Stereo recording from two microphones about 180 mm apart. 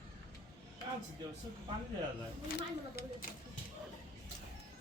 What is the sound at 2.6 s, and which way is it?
Speech, 55° left (ahead or behind).